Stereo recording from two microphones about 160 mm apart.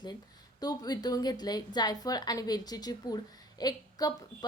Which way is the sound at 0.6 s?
25° left (ahead or behind).